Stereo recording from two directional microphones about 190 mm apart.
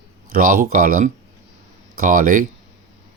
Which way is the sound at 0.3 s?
45° right (ahead or behind).